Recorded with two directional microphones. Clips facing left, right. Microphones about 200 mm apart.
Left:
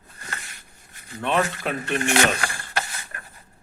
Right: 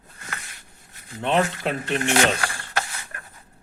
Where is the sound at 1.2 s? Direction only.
20° right (ahead or behind).